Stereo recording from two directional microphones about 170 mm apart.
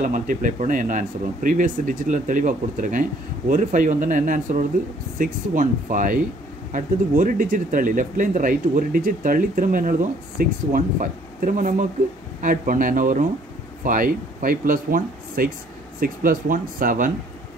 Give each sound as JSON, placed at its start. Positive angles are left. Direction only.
{"t": 0.0, "sound": "speech", "side_deg": -50}